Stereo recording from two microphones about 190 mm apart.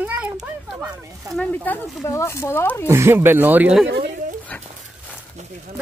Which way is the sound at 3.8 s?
60° right (ahead or behind).